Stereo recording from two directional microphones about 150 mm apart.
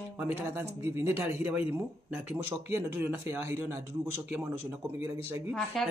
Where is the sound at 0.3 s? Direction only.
15° right (ahead or behind).